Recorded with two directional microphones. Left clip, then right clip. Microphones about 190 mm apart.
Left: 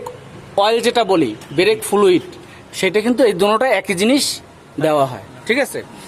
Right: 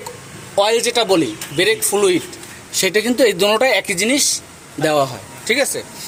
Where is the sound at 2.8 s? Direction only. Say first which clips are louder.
Even; 5° left (ahead or behind).